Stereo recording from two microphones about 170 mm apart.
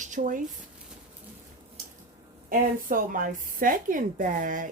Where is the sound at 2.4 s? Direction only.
55° right (ahead or behind).